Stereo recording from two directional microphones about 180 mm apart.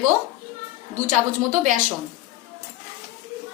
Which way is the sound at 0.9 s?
45° right (ahead or behind).